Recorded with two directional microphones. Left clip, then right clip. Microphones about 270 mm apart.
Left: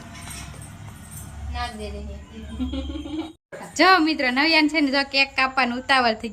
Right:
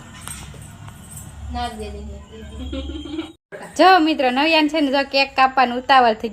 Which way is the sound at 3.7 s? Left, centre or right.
Centre.